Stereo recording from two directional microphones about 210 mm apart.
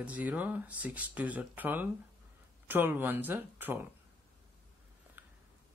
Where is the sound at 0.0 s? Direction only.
5° right (ahead or behind).